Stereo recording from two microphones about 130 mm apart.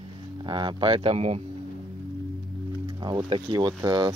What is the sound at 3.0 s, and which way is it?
Speech, 35° right (ahead or behind).